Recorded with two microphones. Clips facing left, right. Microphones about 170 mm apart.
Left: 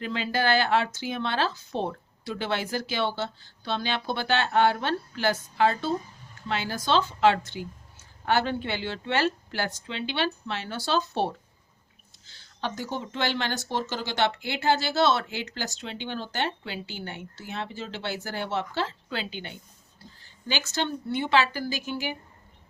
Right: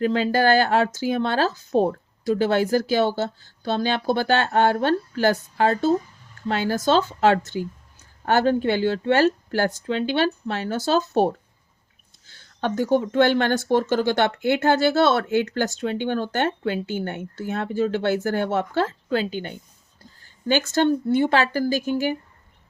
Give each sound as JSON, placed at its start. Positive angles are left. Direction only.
{"t": 0.0, "sound": "speech", "side_deg": -45}
{"t": 20.2, "sound": "a sound", "side_deg": -50}
{"t": 20.7, "sound": "speech", "side_deg": -45}